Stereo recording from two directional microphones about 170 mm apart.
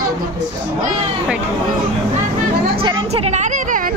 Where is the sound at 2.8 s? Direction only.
30° right (ahead or behind); by 3.9 s 50° right (ahead or behind).